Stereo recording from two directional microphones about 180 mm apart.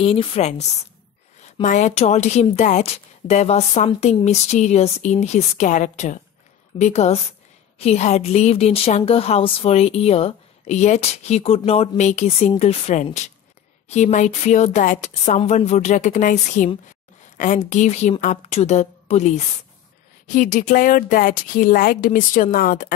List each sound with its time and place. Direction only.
0.0 s a woman's voice: 30° left (ahead or behind); by 22.9 s 50° left (ahead or behind)